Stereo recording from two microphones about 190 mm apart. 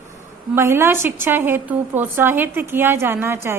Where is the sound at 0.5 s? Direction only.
10° right (ahead or behind).